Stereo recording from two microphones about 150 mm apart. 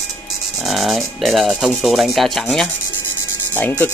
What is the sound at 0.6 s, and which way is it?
Speech, centre (ahead or behind).